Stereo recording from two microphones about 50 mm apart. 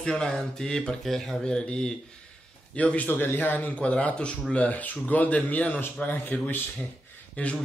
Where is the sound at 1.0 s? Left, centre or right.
Centre.